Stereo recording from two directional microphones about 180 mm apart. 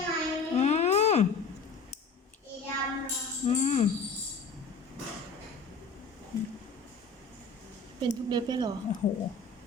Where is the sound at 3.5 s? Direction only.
40° left (ahead or behind).